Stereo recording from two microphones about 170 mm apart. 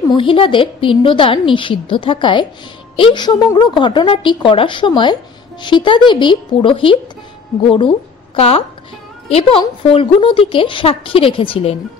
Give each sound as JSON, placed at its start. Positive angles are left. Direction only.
{"t": 0.1, "sound": "a woman's voice", "side_deg": 30}